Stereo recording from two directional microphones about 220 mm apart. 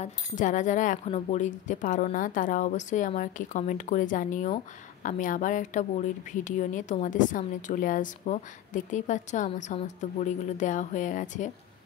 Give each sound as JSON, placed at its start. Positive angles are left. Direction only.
{"t": 0.0, "sound": "a woman's voice", "side_deg": 35}